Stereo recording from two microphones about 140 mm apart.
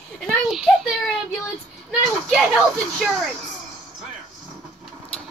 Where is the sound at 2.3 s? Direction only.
Centre (ahead or behind).